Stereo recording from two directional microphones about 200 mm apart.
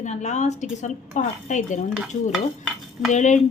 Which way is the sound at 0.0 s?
35° left (ahead or behind).